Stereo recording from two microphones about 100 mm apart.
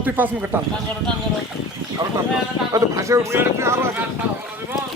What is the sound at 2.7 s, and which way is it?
Speech, 30° right (ahead or behind).